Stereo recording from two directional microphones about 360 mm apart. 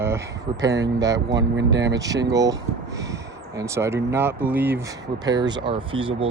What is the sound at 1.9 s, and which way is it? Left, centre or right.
Speech, centre.